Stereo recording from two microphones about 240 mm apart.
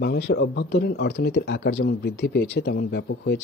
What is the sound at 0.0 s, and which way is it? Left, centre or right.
Speech, left.